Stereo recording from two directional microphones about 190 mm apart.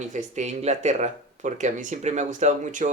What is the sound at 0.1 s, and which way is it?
Speech, 40° right (ahead or behind).